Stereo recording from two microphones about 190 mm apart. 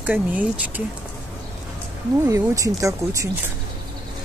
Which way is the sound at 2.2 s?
15° right (ahead or behind).